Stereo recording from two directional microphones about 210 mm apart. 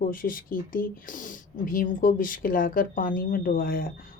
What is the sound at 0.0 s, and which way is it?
Speech, 40° left (ahead or behind).